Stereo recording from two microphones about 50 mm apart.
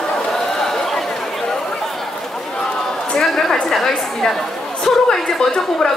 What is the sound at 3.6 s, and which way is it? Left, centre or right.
A woman's voice, centre.